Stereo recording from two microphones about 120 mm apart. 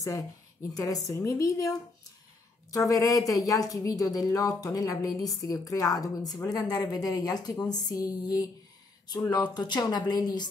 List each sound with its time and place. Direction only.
0.7 s a woman's voice: 30° left (ahead or behind)